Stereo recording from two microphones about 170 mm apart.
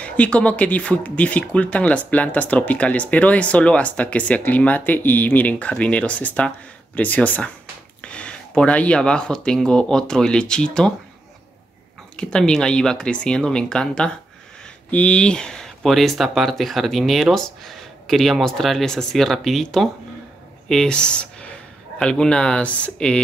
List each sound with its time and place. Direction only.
0.0 s speech: 5° left (ahead or behind)
12.2 s speech: 5° left (ahead or behind)